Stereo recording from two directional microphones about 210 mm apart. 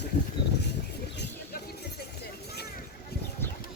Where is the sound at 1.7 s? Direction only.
50° left (ahead or behind).